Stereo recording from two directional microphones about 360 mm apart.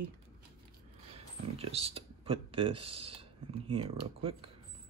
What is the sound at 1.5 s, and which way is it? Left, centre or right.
Speech, centre.